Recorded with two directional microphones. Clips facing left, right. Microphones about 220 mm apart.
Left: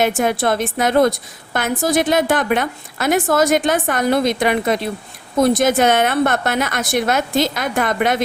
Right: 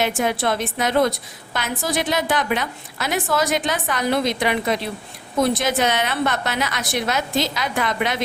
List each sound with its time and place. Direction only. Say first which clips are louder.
0.0 s a woman's voice: left 4 dB; 50° left (ahead or behind)